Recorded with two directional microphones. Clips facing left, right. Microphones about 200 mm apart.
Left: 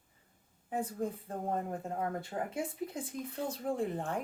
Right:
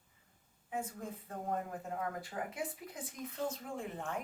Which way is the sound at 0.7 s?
35° left (ahead or behind).